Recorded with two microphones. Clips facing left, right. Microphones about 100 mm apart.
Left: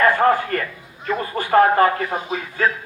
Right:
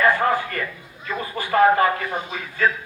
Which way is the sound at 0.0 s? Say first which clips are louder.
Left 3 dB; 45° left (ahead or behind).